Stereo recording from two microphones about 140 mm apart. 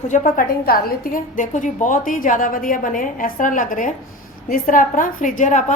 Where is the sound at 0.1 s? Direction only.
70° left (ahead or behind).